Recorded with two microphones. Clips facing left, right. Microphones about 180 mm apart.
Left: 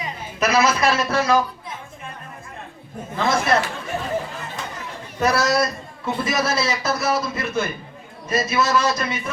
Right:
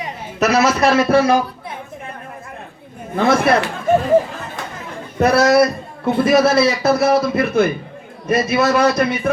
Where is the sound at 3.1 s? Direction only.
60° right (ahead or behind).